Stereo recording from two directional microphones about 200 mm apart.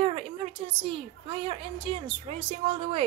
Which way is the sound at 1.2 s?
25° right (ahead or behind).